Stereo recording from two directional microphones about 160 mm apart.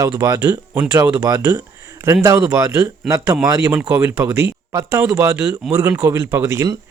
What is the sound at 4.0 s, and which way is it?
A man's voice, 15° right (ahead or behind).